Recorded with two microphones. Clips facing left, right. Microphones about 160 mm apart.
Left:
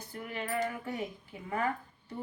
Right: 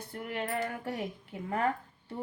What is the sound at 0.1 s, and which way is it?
Speech, 55° right (ahead or behind).